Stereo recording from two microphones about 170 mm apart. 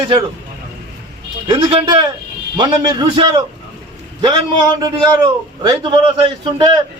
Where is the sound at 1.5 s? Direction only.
30° right (ahead or behind).